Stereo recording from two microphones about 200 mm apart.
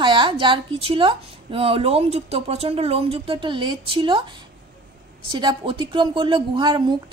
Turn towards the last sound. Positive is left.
turn(degrees=-25)  # may be behind; listen again after turning